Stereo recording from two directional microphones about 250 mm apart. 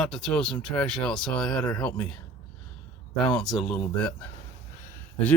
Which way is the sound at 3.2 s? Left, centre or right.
Centre.